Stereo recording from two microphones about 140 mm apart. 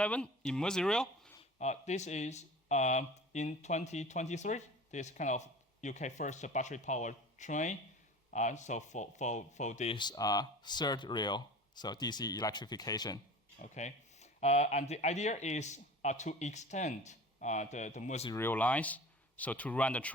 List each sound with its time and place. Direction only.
0.0 s speech: 10° left (ahead or behind)
1.5 s speech: 55° left (ahead or behind)
9.9 s speech: 30° left (ahead or behind)
13.6 s speech: 55° left (ahead or behind)
18.3 s speech: 15° left (ahead or behind)